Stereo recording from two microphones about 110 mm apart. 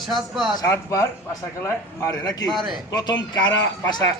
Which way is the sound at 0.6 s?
30° left (ahead or behind).